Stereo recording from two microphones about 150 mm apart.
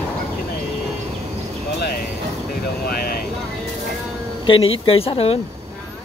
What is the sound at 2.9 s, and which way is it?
Vehicle, 90° left.